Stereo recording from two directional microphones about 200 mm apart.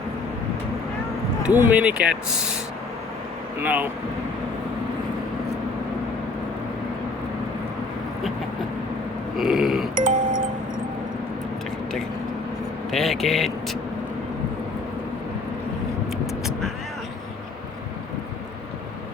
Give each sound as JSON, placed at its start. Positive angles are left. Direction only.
{"t": 1.4, "sound": "speech", "side_deg": -10}
{"t": 3.6, "sound": "speech", "side_deg": -10}
{"t": 9.4, "sound": "speech", "side_deg": 0}
{"t": 9.9, "sound": "music", "side_deg": -40}
{"t": 12.9, "sound": "speech", "side_deg": 0}
{"t": 16.5, "sound": "vehicle", "side_deg": 0}